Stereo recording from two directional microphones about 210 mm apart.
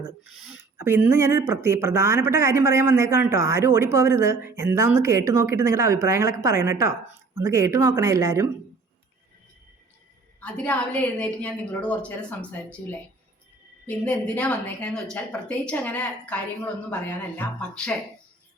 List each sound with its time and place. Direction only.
0.0 s speech: 70° left (ahead or behind)
0.5 s speech: 10° right (ahead or behind)
10.4 s a woman's voice: 5° left (ahead or behind)
13.8 s a woman's voice: 5° left (ahead or behind)